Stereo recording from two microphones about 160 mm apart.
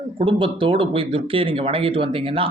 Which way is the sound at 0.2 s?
35° right (ahead or behind).